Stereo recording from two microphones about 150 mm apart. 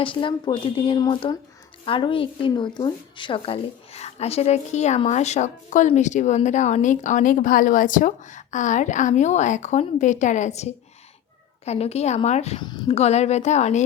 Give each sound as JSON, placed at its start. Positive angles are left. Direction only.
{"t": 0.0, "sound": "a woman's voice", "side_deg": 35}
{"t": 12.5, "sound": "speech", "side_deg": 30}
{"t": 12.9, "sound": "a woman's voice", "side_deg": 45}